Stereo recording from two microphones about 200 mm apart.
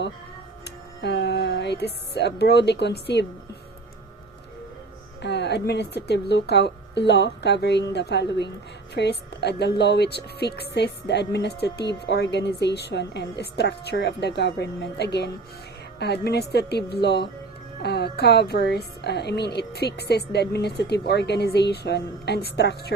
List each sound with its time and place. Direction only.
0.6 s speech: 55° left (ahead or behind)
5.2 s a woman's voice: 60° left (ahead or behind)